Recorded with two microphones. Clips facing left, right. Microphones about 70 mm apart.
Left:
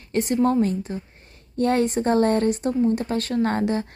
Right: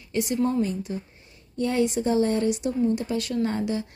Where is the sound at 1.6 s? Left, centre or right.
Left.